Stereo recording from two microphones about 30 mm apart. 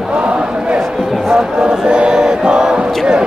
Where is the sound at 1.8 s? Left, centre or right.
Right.